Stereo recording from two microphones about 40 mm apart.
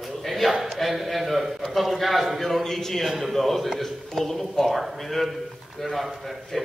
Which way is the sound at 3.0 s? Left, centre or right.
Centre.